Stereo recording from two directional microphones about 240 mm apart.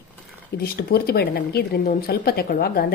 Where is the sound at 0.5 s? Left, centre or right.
Left.